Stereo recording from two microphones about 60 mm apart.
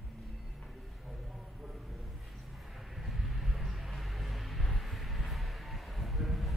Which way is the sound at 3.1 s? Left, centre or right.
Centre.